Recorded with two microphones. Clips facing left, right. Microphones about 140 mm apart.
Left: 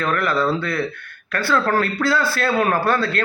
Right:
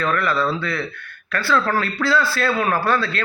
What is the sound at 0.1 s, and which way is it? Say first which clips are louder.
Speech: left 1 dB; 50° left (ahead or behind).